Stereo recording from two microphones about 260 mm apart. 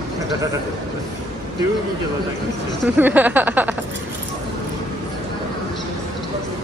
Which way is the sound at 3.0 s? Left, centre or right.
Centre.